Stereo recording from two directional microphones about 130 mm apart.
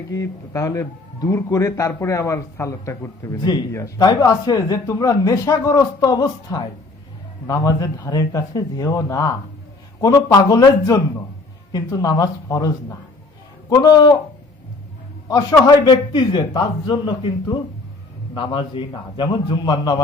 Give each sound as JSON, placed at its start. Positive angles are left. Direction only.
{"t": 0.1, "sound": "a man's voice", "side_deg": 25}
{"t": 15.3, "sound": "a man's voice", "side_deg": 25}